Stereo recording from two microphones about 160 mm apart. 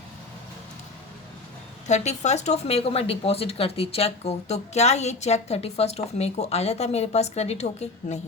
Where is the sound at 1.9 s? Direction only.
45° left (ahead or behind).